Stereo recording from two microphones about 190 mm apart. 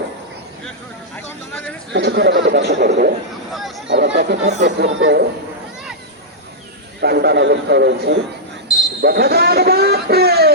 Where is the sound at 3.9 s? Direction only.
65° right (ahead or behind).